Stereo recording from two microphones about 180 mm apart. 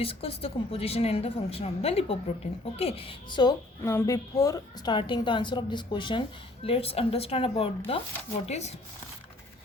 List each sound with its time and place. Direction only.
0.0 s a woman's voice: 30° left (ahead or behind)